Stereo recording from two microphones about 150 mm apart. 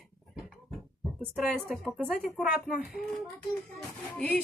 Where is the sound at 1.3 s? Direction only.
5° right (ahead or behind).